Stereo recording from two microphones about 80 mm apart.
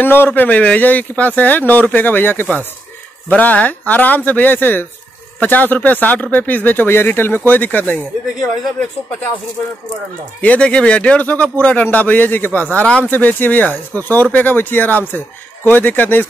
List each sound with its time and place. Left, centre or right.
0.0 s speech: left
10.4 s speech: centre